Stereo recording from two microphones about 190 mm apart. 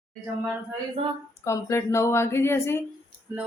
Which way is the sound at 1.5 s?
15° left (ahead or behind).